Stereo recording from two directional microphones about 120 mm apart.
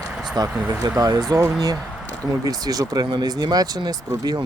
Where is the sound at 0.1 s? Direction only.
5° right (ahead or behind).